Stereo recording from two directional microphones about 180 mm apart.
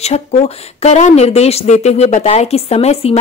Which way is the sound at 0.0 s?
35° left (ahead or behind).